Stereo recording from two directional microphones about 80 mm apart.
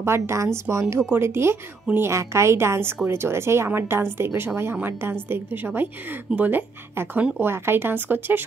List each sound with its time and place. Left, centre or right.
0.0 s a woman's voice: right